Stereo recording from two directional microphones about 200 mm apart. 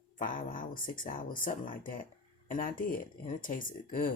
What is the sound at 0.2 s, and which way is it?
Speech, 40° left (ahead or behind).